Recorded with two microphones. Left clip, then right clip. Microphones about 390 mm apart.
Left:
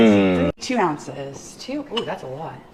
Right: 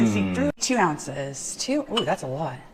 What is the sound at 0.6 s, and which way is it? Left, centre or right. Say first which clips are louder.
A woman's voice: left 1 dB; right.